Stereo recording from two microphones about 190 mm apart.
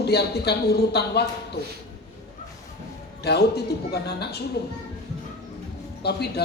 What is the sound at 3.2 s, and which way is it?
A man's voice, 60° left (ahead or behind).